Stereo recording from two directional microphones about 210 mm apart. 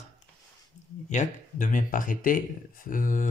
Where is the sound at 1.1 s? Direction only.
35° left (ahead or behind).